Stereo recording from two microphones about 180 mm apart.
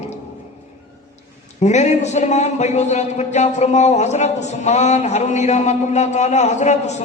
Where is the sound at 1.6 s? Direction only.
40° left (ahead or behind).